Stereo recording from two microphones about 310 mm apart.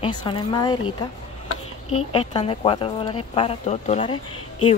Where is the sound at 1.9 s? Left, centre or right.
Centre.